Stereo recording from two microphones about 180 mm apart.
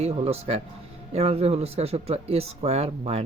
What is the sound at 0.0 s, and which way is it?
Speech, 35° right (ahead or behind).